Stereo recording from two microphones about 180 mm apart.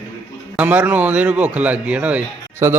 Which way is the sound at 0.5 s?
10° right (ahead or behind).